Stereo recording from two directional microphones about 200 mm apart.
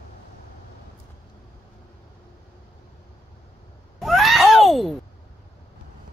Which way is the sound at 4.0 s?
Centre (ahead or behind).